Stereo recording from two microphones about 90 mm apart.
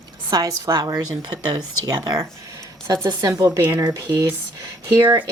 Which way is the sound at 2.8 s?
35° right (ahead or behind).